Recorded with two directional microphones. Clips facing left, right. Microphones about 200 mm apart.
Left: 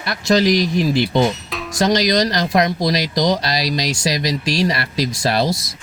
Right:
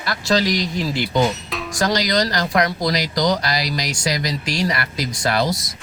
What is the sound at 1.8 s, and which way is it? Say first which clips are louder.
Speech: left 4 dB; 20° left (ahead or behind).